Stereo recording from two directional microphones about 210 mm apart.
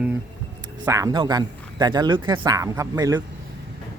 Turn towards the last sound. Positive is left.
turn(degrees=-15)  # may be behind; listen again after turning